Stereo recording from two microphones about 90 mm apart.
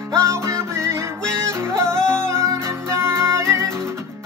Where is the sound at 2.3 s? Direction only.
30° right (ahead or behind).